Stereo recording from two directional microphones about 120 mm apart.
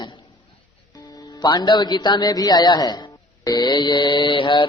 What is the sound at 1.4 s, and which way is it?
Mantra, 40° left (ahead or behind).